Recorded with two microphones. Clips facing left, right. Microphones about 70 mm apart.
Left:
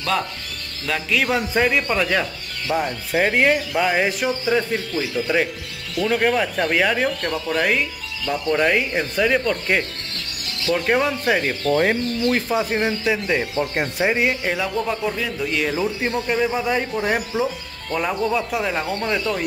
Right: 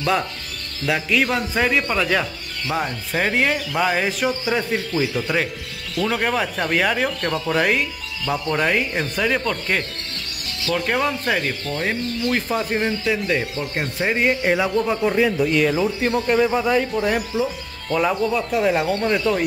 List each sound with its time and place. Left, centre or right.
0.8 s speech: centre
1.3 s speech: centre
4.5 s speech: centre
11.7 s speech: left
12.3 s speech: centre
14.0 s speech: centre
14.4 s speech: centre
15.0 s a man's voice: right
15.5 s speech: centre
16.7 s speech: centre
17.9 s speech: centre